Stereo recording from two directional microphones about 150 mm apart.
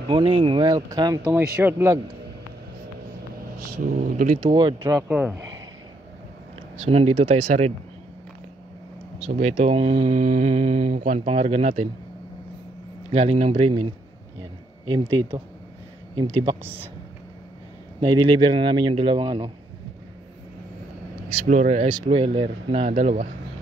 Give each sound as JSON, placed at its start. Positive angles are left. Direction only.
{"t": 0.1, "sound": "a man's voice", "side_deg": -35}
{"t": 3.7, "sound": "speech", "side_deg": -65}
{"t": 4.8, "sound": "a man's voice", "side_deg": -20}
{"t": 6.8, "sound": "speech", "side_deg": -45}
{"t": 9.2, "sound": "speech", "side_deg": -50}
{"t": 13.1, "sound": "speech", "side_deg": -40}
{"t": 14.9, "sound": "speech", "side_deg": -30}
{"t": 18.0, "sound": "speech", "side_deg": -30}
{"t": 21.3, "sound": "speech", "side_deg": -65}
{"t": 22.1, "sound": "speech", "side_deg": -40}